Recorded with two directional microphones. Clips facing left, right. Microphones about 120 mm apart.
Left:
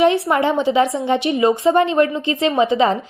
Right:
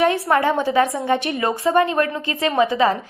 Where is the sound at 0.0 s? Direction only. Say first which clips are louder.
Left 2 dB; 20° left (ahead or behind).